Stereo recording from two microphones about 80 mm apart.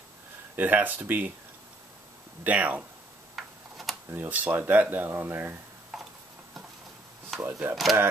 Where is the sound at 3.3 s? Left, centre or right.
Centre.